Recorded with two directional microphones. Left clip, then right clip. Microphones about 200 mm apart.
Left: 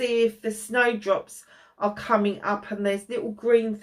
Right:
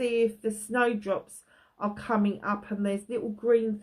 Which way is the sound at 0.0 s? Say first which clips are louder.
Left 3 dB; 50° right (ahead or behind).